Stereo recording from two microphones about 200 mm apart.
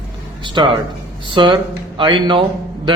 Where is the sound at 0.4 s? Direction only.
25° right (ahead or behind).